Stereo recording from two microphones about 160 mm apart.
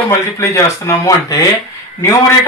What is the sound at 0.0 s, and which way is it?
Speech, 20° left (ahead or behind).